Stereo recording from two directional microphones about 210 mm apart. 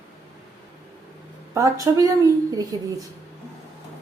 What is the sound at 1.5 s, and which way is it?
Speech, 15° right (ahead or behind).